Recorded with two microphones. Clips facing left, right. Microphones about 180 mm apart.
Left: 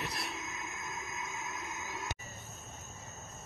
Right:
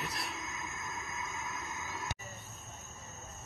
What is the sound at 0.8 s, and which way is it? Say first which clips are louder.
Train: even; 20° left (ahead or behind).